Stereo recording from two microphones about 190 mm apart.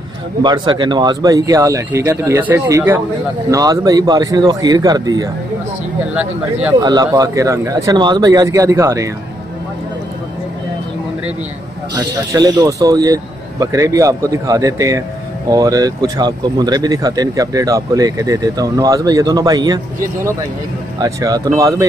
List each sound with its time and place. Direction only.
0.4 s a man's voice: 25° right (ahead or behind)
6.8 s a man's voice: 20° right (ahead or behind)
11.9 s a man's voice: 20° right (ahead or behind)
21.0 s a man's voice: 20° right (ahead or behind)